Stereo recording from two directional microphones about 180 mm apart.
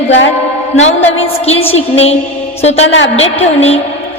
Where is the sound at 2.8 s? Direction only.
90° left.